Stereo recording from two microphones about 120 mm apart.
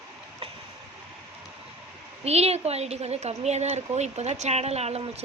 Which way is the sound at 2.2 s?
60° right (ahead or behind).